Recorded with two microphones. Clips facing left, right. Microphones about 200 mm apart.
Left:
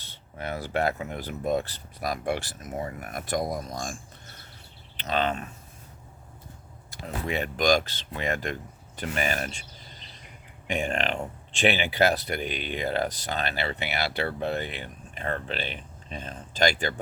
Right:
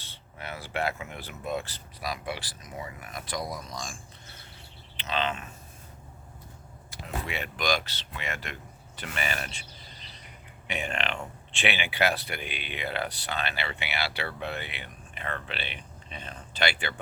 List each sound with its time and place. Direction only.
0.3 s speech: 40° left (ahead or behind)
7.0 s speech: 40° left (ahead or behind)
10.7 s speech: 45° left (ahead or behind)